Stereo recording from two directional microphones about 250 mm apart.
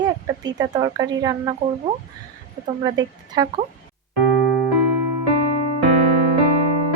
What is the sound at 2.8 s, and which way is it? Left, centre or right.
Speech, centre.